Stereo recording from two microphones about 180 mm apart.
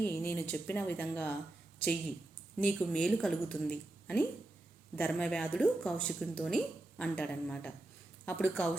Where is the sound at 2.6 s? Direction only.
5° left (ahead or behind).